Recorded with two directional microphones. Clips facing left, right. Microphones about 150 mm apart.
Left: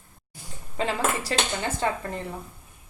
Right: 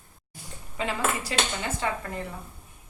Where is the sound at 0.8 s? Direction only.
35° left (ahead or behind).